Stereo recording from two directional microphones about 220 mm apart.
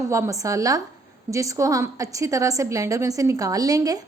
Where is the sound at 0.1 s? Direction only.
15° right (ahead or behind).